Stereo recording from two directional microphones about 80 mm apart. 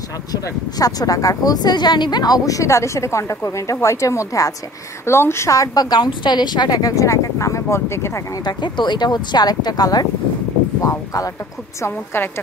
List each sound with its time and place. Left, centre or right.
0.3 s a woman's voice: left
5.9 s speech: left
8.5 s speech: left
10.8 s speech: left
11.8 s a woman's voice: left